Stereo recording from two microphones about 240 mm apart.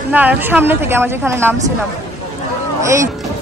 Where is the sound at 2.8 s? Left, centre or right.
Centre.